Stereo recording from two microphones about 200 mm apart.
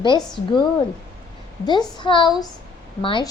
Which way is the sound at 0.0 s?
25° left (ahead or behind).